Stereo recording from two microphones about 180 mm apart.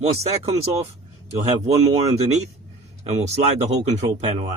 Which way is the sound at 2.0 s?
35° right (ahead or behind).